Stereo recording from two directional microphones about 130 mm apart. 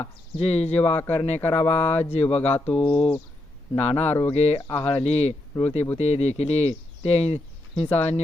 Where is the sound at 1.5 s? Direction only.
50° left (ahead or behind).